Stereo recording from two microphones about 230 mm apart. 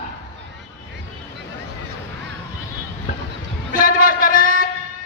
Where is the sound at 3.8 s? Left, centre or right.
Left.